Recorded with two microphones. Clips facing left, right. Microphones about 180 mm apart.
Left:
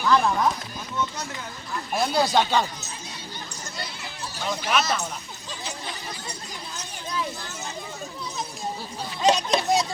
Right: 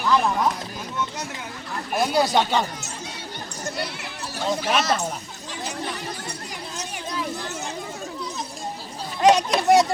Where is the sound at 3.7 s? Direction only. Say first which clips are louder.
Right 6 dB; 70° right (ahead or behind).